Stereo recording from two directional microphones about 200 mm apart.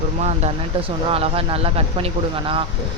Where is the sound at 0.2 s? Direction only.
35° right (ahead or behind).